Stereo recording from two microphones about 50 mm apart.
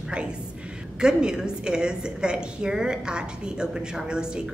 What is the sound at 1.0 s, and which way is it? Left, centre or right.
A woman's voice, centre.